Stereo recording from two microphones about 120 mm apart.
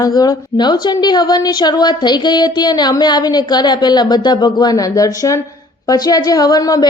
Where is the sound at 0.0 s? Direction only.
35° left (ahead or behind).